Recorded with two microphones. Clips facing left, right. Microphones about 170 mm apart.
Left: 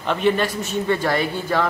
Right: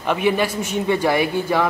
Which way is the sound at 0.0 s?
10° right (ahead or behind).